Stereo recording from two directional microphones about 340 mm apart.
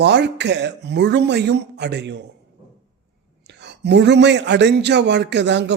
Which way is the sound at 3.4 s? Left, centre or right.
Right.